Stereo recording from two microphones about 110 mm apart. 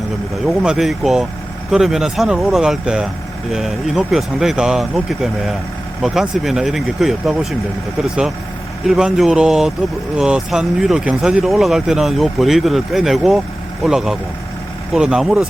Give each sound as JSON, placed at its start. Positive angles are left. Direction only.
{"t": 0.4, "sound": "speech", "side_deg": -5}